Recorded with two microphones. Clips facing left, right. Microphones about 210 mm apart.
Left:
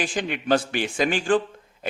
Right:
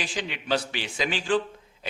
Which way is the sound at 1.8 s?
50° left (ahead or behind).